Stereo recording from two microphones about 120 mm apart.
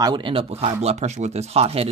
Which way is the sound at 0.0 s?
40° right (ahead or behind).